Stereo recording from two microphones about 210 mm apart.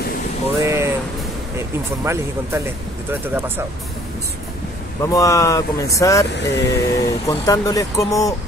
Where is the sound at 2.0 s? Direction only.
15° right (ahead or behind).